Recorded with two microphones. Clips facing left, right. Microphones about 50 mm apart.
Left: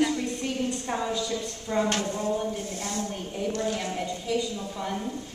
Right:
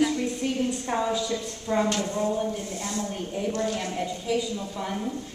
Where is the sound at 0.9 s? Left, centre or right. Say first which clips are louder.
Right 3 dB; centre.